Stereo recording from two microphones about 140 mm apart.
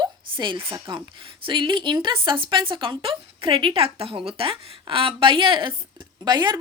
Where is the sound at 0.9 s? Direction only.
40° right (ahead or behind).